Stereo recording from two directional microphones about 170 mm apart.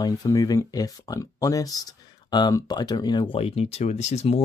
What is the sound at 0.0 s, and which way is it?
Speech, 20° left (ahead or behind).